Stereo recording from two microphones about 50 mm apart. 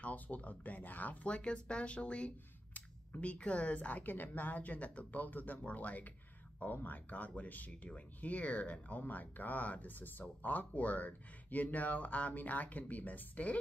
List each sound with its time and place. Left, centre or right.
0.0 s speech: left